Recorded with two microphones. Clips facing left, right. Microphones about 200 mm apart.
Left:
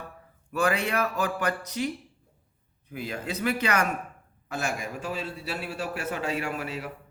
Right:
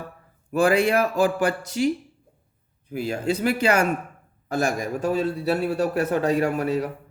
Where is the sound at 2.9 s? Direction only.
30° right (ahead or behind).